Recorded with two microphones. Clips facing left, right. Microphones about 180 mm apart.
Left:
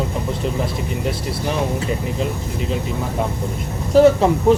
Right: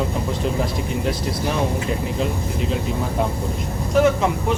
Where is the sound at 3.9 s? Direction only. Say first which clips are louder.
Left 5 dB; 35° left (ahead or behind).